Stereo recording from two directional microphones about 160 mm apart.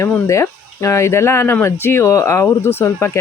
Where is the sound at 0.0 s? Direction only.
20° left (ahead or behind).